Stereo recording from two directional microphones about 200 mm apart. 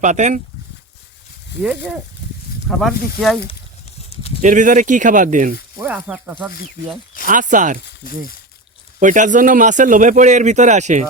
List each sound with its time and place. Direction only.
0.0 s speech: 35° right (ahead or behind)
2.6 s speech: centre (ahead or behind)
4.4 s speech: 40° right (ahead or behind)
5.8 s speech: 10° right (ahead or behind)
7.3 s speech: 40° right (ahead or behind)
9.0 s speech: 40° right (ahead or behind)